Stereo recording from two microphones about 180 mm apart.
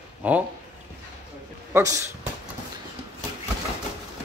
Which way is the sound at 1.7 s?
15° right (ahead or behind).